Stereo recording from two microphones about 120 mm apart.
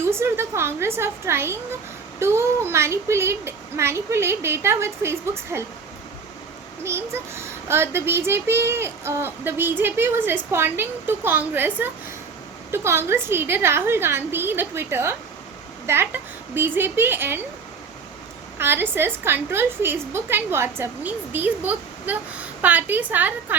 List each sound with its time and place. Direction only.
0.0 s child singing: 20° right (ahead or behind)
6.8 s child singing: 20° right (ahead or behind)
15.9 s a woman's voice: 20° right (ahead or behind)
18.6 s a woman's voice: 20° right (ahead or behind)